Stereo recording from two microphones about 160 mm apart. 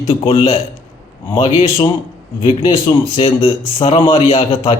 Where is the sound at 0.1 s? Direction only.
35° left (ahead or behind).